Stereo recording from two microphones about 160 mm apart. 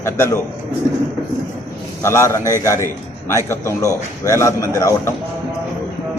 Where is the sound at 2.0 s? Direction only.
20° left (ahead or behind).